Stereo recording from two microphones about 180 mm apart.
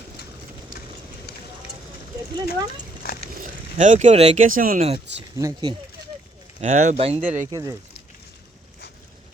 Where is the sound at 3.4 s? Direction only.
45° right (ahead or behind).